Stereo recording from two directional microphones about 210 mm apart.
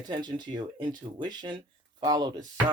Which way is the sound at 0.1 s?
20° right (ahead or behind).